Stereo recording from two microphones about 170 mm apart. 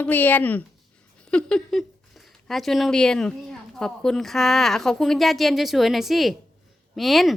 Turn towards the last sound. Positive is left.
turn(degrees=0)  # may be behind; listen again after turning